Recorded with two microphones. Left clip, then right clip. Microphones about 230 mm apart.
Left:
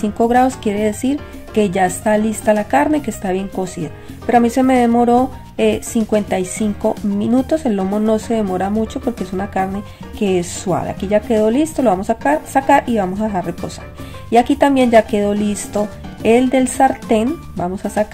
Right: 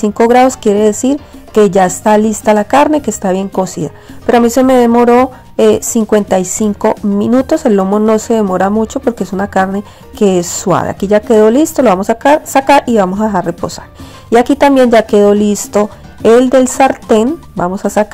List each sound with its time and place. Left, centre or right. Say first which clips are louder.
0.0 s speech: right 7 dB; right
4.9 s speech: right 6 dB; centre
5.6 s speech: right 7 dB; right